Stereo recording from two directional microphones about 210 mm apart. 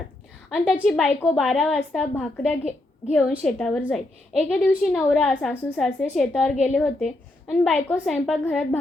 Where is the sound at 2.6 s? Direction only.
35° left (ahead or behind).